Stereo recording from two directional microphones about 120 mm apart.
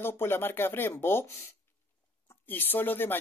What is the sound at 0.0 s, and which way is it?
Speech, 20° left (ahead or behind).